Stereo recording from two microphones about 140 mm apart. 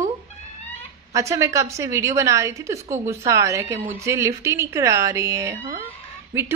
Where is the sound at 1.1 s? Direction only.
20° right (ahead or behind).